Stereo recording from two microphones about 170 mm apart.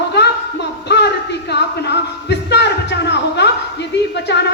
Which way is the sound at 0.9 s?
90° left.